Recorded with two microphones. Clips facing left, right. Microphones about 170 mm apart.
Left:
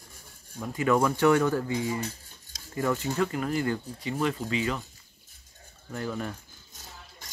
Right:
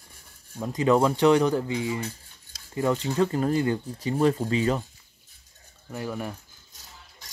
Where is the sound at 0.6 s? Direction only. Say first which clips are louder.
Right 3 dB; 25° right (ahead or behind).